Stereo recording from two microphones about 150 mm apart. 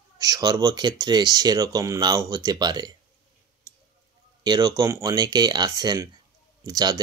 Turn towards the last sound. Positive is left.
turn(degrees=-25)  # may be behind; listen again after turning